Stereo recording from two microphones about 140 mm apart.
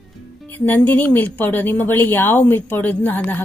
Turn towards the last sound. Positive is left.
turn(degrees=10)  # may be behind; listen again after turning